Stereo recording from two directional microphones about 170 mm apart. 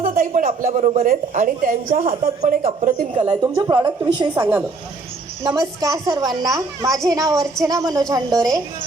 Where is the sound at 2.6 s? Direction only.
40° right (ahead or behind).